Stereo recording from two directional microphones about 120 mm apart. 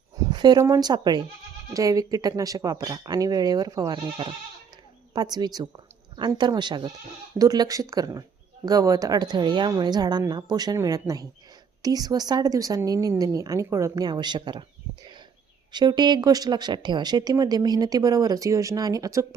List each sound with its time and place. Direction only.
0.3 s speech: 35° right (ahead or behind)
15.7 s speech: 35° right (ahead or behind)